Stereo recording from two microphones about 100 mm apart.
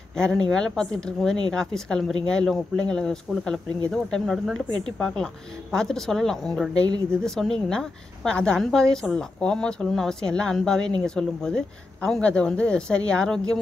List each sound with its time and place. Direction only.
0.2 s a woman's voice: 5° left (ahead or behind)